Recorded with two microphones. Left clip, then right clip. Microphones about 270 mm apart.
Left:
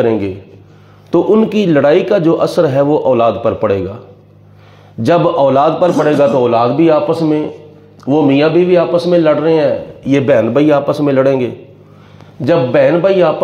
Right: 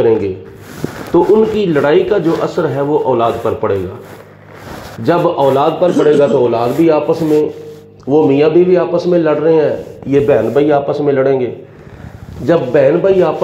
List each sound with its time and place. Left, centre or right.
0.0 s a man's voice: left
5.0 s a man's voice: left